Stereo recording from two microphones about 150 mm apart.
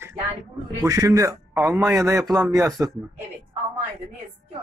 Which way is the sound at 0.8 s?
20° right (ahead or behind).